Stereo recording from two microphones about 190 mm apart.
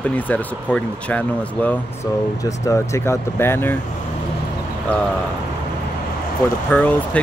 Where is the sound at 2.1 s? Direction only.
20° left (ahead or behind).